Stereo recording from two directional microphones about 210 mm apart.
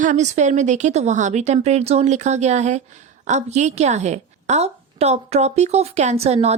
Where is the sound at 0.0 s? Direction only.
35° right (ahead or behind).